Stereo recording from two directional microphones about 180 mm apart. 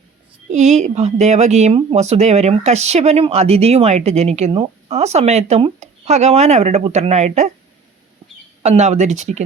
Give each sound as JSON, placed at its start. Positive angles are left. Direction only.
{"t": 0.5, "sound": "speech", "side_deg": -40}
{"t": 8.6, "sound": "speech", "side_deg": -40}